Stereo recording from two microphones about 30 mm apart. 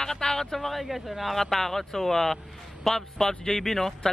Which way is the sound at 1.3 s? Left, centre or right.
Centre.